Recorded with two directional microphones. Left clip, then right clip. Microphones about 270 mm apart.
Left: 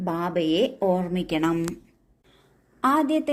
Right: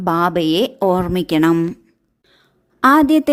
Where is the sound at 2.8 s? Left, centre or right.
Right.